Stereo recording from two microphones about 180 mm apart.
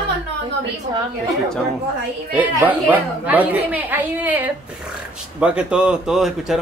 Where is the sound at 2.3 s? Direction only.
10° right (ahead or behind).